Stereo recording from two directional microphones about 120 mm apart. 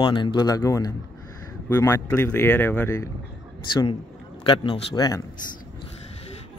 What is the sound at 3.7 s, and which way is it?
Speech, 40° left (ahead or behind).